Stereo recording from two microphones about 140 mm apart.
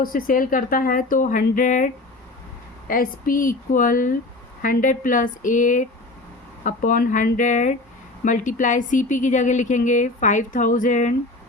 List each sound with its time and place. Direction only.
0.0 s speech: 90° left; by 1.9 s 70° left (ahead or behind)
2.8 s speech: 90° left; by 11.1 s 65° left (ahead or behind)